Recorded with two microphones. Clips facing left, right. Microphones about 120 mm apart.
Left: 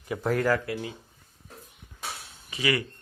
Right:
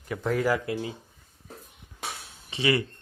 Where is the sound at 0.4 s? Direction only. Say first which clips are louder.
Even; 15° right (ahead or behind).